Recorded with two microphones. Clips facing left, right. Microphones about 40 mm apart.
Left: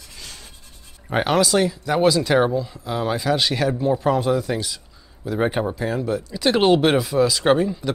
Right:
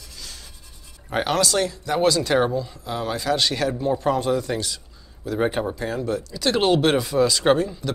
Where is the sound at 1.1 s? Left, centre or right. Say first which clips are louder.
Left 3 dB; centre.